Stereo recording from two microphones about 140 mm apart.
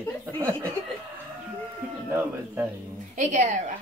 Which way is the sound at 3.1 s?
60° right (ahead or behind).